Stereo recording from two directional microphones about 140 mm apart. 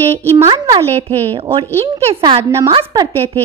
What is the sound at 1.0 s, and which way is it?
Speech, 45° right (ahead or behind).